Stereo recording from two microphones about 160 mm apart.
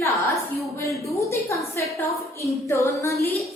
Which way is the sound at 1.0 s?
20° left (ahead or behind).